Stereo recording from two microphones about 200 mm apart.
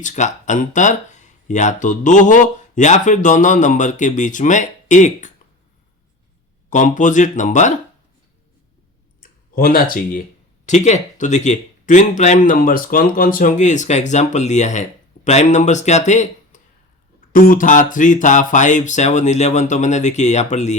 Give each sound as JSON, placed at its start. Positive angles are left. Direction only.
{"t": 0.0, "sound": "speech", "side_deg": 35}
{"t": 6.7, "sound": "speech", "side_deg": 40}
{"t": 9.2, "sound": "speech", "side_deg": 45}